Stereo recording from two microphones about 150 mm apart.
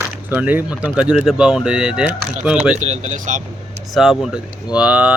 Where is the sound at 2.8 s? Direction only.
50° right (ahead or behind).